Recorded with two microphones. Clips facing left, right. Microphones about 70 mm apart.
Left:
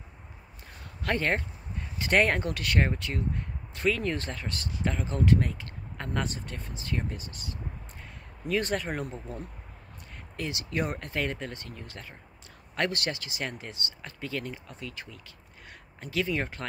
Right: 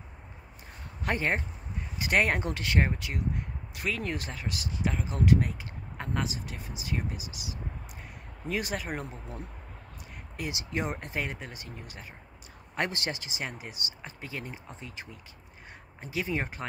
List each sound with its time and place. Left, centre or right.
1.0 s speech: centre
2.4 s speech: right
10.3 s speech: centre